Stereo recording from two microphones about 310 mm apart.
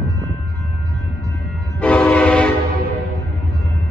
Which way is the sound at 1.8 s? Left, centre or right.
Centre.